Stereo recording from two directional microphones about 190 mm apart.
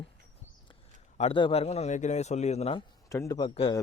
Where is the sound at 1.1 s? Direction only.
30° left (ahead or behind).